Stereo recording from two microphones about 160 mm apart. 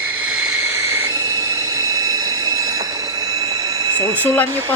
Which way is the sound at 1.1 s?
20° right (ahead or behind).